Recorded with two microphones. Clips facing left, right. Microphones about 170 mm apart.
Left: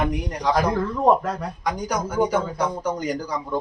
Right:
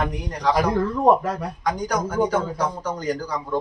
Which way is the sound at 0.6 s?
10° right (ahead or behind).